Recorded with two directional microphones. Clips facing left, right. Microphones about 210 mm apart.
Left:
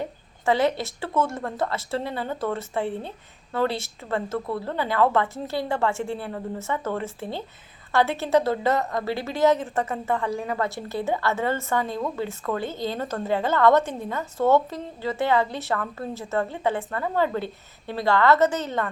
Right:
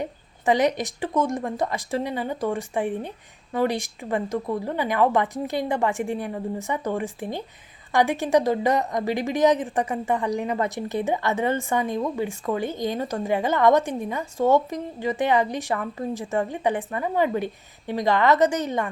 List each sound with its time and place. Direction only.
0.0 s a woman's voice: 15° right (ahead or behind)